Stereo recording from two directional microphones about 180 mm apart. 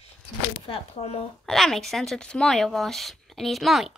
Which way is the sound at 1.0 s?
35° left (ahead or behind).